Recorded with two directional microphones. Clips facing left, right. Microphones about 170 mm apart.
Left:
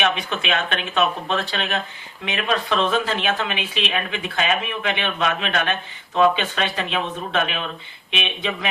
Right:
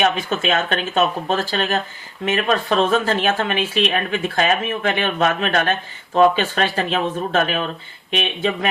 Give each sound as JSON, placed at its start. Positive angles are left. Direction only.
{"t": 0.0, "sound": "speech", "side_deg": -40}